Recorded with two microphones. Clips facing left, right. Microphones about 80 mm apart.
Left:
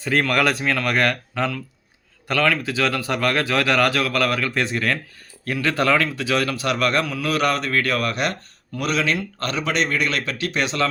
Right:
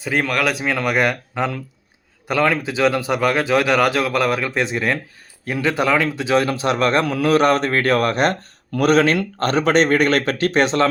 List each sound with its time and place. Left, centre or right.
0.0 s speech: centre; by 7.0 s right
7.0 s speech: right